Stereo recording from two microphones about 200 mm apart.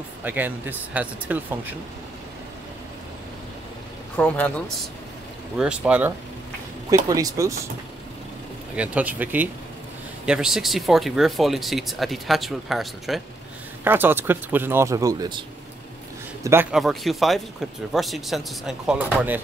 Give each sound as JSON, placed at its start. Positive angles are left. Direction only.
{"t": 0.2, "sound": "speech", "side_deg": -10}
{"t": 4.2, "sound": "speech", "side_deg": 5}
{"t": 5.6, "sound": "speech", "side_deg": -5}
{"t": 6.9, "sound": "speech", "side_deg": -15}
{"t": 8.7, "sound": "speech", "side_deg": -5}
{"t": 16.7, "sound": "speech", "side_deg": 0}